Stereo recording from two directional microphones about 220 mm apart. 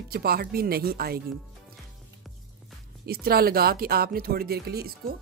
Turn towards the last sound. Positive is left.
turn(degrees=-45)  # may be behind; listen again after turning